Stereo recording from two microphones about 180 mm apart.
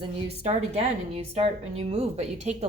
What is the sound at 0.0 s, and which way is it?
A woman's voice, 35° right (ahead or behind).